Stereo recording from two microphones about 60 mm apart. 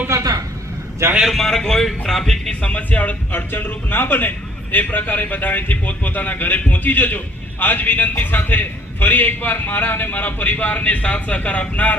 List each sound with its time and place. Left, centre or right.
1.2 s a man's voice: centre
2.6 s a man's voice: left